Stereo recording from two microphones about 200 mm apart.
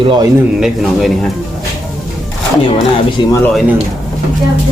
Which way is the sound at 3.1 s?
20° left (ahead or behind).